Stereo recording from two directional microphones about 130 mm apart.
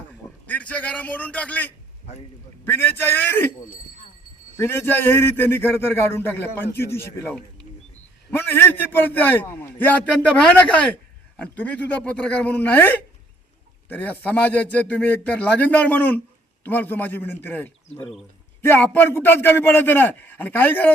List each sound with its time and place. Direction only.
0.1 s a man's voice: 10° left (ahead or behind)
4.5 s a man's voice: 20° left (ahead or behind)
18.0 s speech: centre (ahead or behind)
18.6 s a man's voice: 15° left (ahead or behind)